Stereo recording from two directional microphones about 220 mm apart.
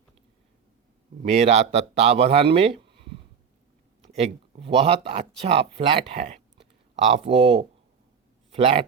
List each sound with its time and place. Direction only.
1.3 s speech: 30° right (ahead or behind)